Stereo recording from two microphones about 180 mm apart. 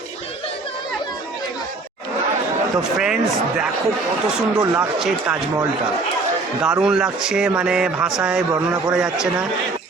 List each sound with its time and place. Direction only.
2.7 s speech: 5° right (ahead or behind)
4.5 s speech: 20° right (ahead or behind)
4.8 s speech: 5° right (ahead or behind)
6.6 s speech: 5° right (ahead or behind)